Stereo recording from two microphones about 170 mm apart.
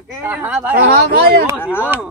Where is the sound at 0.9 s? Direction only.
65° right (ahead or behind).